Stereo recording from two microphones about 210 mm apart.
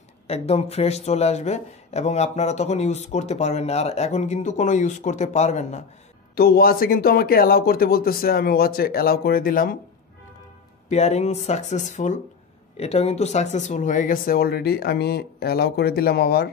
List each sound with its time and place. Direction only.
0.3 s speech: 30° left (ahead or behind)
6.3 s speech: 45° left (ahead or behind)
10.9 s speech: 30° left (ahead or behind); by 16.4 s 50° left (ahead or behind)